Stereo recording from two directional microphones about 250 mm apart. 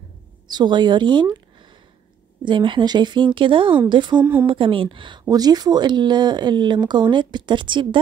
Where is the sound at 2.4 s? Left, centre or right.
Centre.